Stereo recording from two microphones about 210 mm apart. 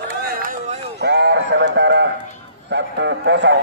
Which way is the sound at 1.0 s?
55° right (ahead or behind).